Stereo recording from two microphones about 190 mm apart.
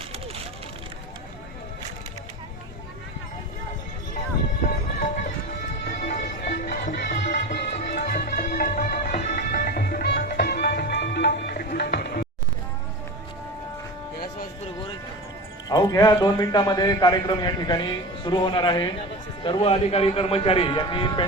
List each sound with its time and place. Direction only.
4.6 s music: 45° left (ahead or behind)
15.7 s a man's voice: 20° left (ahead or behind)